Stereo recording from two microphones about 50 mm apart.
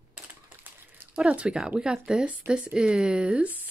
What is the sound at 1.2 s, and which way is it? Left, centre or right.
Speech, right.